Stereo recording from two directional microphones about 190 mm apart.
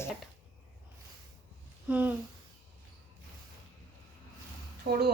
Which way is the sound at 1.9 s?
10° right (ahead or behind).